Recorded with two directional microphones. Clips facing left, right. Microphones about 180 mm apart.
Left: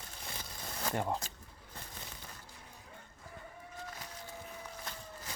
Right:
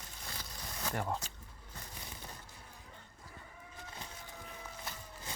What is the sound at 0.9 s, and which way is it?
Speech, 20° left (ahead or behind).